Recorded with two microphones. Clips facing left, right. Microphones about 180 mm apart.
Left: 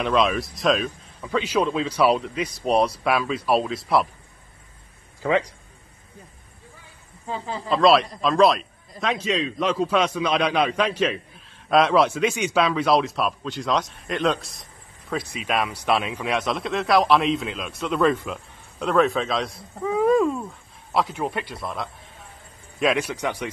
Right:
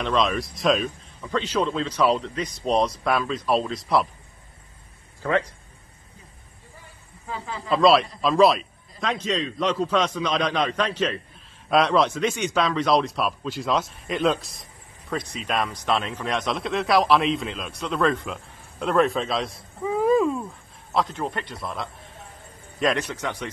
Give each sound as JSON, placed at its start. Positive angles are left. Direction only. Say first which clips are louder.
{"t": 0.0, "sound": "speech", "louder": "left 2 dB", "side_deg": 5}
{"t": 5.2, "sound": "speech", "louder": "left 2 dB", "side_deg": 15}
{"t": 7.2, "sound": "speech", "louder": "left 3 dB", "side_deg": 30}
{"t": 7.7, "sound": "a man's voice", "louder": "even", "side_deg": 0}